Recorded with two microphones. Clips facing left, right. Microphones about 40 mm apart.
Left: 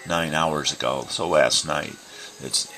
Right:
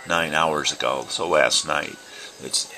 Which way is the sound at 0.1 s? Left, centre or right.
Centre.